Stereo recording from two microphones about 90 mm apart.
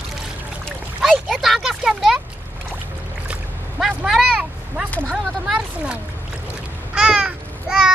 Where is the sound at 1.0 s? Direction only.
5° left (ahead or behind).